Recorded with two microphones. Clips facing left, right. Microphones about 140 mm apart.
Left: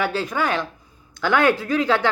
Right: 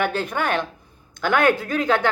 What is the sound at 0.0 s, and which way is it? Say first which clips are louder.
Speech: even; 55° right (ahead or behind).